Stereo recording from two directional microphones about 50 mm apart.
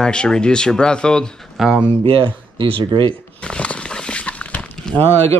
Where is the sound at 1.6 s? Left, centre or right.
Centre.